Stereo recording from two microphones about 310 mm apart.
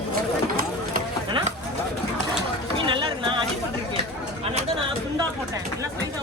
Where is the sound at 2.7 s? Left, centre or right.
Centre.